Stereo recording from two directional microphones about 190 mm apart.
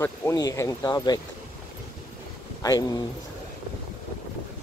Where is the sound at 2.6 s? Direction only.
20° left (ahead or behind).